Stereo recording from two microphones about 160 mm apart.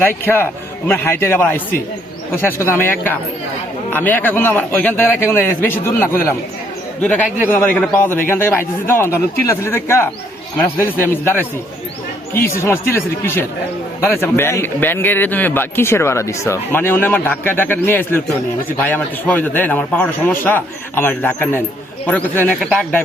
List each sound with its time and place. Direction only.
0.9 s a man's voice: 15° left (ahead or behind)